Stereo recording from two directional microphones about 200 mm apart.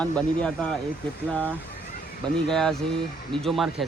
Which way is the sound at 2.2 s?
Centre (ahead or behind).